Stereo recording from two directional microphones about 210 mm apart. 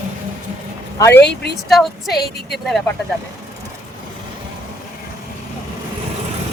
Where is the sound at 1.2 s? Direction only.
50° left (ahead or behind).